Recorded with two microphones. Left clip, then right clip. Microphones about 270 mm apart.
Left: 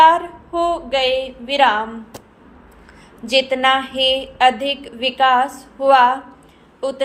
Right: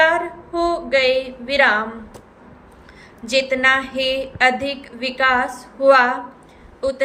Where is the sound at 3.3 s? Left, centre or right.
Centre.